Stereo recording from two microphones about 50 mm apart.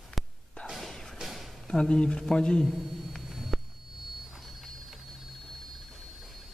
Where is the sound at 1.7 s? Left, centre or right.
Centre.